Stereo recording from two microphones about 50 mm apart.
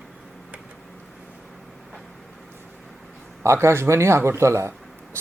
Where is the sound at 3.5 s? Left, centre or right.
Right.